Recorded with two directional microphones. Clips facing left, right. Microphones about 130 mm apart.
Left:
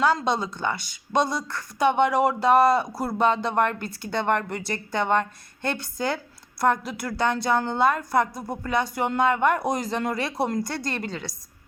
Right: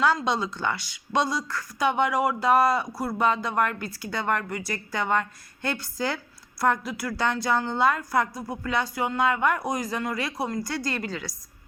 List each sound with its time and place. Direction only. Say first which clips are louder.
0.0 s a woman's voice: left 1 dB; 20° left (ahead or behind)